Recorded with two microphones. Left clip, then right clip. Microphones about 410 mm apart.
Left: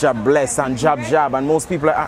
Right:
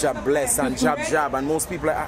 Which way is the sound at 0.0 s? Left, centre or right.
Left.